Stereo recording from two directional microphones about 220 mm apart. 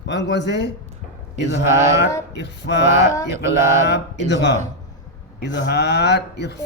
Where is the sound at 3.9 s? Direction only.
50° left (ahead or behind).